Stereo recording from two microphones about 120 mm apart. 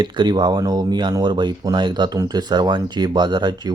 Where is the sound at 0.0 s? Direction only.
40° right (ahead or behind).